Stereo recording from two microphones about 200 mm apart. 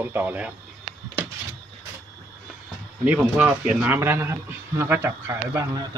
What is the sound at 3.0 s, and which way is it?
A man's voice, 5° right (ahead or behind).